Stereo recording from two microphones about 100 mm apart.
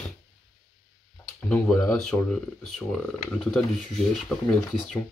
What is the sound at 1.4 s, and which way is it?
Speech, 15° left (ahead or behind).